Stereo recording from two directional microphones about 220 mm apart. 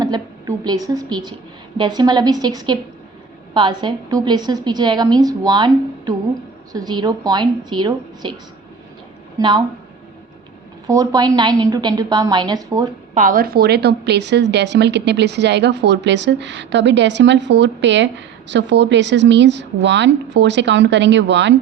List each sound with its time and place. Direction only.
0.0 s a woman's voice: 15° right (ahead or behind)
9.4 s a woman's voice: 20° right (ahead or behind)
10.8 s a woman's voice: 15° right (ahead or behind)
13.1 s a woman's voice: 40° right (ahead or behind); by 21.5 s 55° right (ahead or behind)